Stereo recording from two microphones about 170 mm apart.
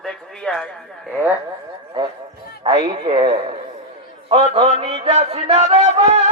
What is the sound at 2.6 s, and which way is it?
Speech, 25° right (ahead or behind).